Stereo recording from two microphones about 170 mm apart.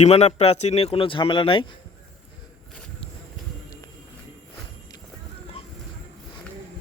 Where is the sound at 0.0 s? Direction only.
40° left (ahead or behind).